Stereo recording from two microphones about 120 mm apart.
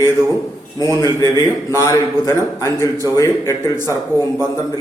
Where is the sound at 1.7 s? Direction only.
25° left (ahead or behind).